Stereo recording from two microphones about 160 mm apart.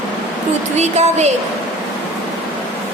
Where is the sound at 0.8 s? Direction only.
45° right (ahead or behind).